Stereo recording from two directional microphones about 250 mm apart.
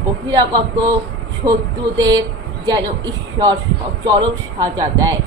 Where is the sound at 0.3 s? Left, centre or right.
Centre.